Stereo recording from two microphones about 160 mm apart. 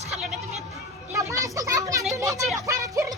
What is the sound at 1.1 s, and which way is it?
Children playing, 20° right (ahead or behind).